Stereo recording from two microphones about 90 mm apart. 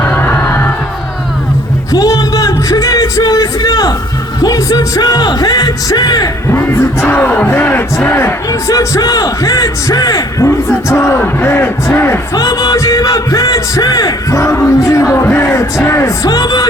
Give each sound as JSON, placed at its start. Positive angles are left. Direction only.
{"t": 0.0, "sound": "music", "side_deg": 20}
{"t": 1.9, "sound": "music", "side_deg": 40}
{"t": 3.2, "sound": "a sound", "side_deg": 45}
{"t": 4.9, "sound": "music", "side_deg": 50}
{"t": 6.5, "sound": "music", "side_deg": 25}
{"t": 8.0, "sound": "speech", "side_deg": 30}
{"t": 12.3, "sound": "speech", "side_deg": 40}
{"t": 15.3, "sound": "music", "side_deg": 25}
{"t": 16.2, "sound": "music", "side_deg": 45}